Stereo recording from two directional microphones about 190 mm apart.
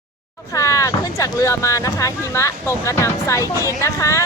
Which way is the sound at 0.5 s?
15° left (ahead or behind).